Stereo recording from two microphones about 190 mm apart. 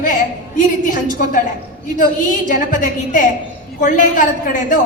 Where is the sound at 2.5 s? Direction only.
45° left (ahead or behind).